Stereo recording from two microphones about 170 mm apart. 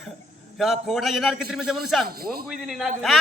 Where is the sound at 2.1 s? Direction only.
60° right (ahead or behind).